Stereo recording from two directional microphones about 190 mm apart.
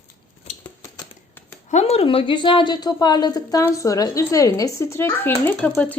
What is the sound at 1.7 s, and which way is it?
A woman's voice, 35° left (ahead or behind).